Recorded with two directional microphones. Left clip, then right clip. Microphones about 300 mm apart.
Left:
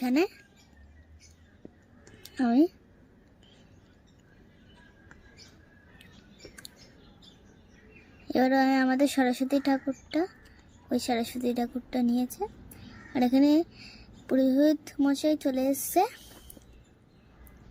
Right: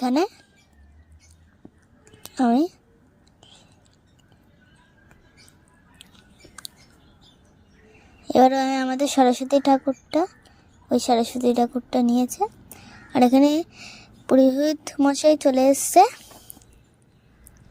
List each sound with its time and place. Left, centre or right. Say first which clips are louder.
0.0 s speech: right 5 dB; centre
2.3 s speech: right 4 dB; right
8.3 s a woman's voice: right 7 dB; right